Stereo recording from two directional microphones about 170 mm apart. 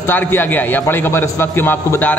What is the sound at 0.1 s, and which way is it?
A man's voice, 10° left (ahead or behind).